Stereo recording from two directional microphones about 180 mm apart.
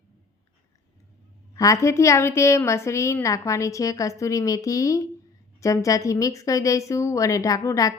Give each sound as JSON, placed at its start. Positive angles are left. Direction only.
{"t": 1.5, "sound": "a woman's voice", "side_deg": 15}